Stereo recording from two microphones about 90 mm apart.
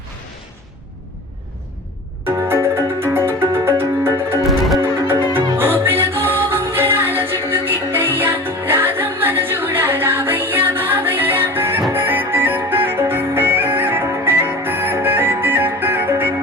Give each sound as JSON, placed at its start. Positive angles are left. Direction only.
{"t": 2.2, "sound": "music", "side_deg": -25}
{"t": 5.5, "sound": "music", "side_deg": -25}